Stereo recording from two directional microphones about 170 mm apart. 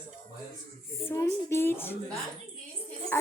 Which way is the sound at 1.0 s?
15° left (ahead or behind).